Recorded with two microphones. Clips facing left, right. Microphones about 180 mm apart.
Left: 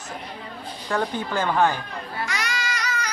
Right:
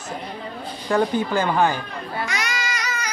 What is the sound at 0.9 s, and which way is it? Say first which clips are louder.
Speech: right 5 dB; 5° right (ahead or behind).